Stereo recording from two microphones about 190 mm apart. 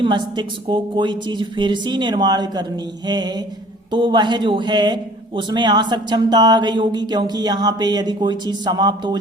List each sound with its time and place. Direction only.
0.0 s speech: 25° right (ahead or behind)